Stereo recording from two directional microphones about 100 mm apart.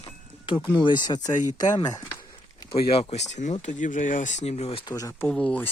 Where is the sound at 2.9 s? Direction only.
85° left.